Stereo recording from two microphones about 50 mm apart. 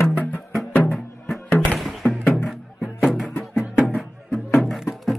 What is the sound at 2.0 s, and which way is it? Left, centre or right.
Music, left.